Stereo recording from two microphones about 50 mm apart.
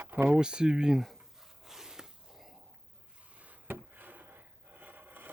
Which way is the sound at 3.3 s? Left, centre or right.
Right.